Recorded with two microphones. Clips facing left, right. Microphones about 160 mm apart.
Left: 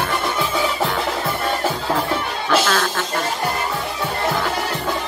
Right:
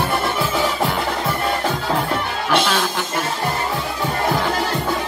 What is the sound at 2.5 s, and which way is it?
Music, centre (ahead or behind).